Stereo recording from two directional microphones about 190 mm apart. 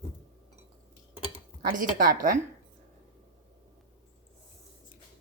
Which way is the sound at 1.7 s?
45° right (ahead or behind).